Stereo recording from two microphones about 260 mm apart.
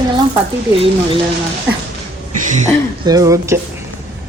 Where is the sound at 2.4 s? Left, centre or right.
Right.